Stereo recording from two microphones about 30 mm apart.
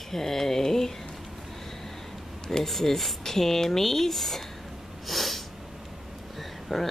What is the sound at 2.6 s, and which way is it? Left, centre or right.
Speech, centre.